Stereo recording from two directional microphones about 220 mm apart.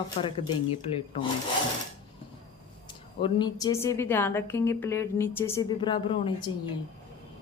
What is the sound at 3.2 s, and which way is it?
A woman's voice, 20° left (ahead or behind).